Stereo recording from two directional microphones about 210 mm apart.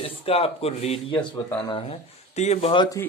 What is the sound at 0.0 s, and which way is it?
Speech, 30° left (ahead or behind).